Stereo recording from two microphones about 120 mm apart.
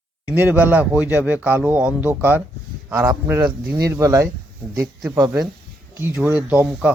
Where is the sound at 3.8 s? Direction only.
30° right (ahead or behind).